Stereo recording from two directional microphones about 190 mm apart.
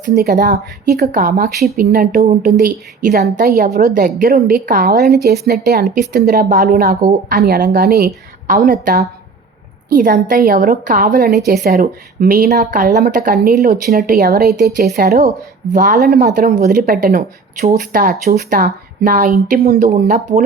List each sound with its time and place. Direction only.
0.0 s a woman's voice: 50° right (ahead or behind)